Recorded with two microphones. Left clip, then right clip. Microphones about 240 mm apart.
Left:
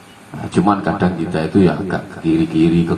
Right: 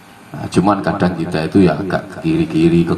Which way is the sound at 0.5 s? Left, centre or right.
Right.